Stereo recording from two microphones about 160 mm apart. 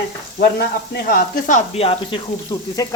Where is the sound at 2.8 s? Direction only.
25° left (ahead or behind).